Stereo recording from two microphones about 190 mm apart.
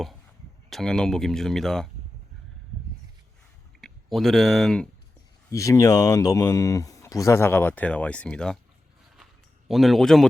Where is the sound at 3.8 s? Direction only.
Centre (ahead or behind).